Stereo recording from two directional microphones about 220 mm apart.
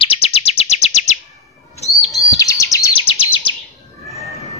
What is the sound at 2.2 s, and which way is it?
Bird vocalization, 15° left (ahead or behind).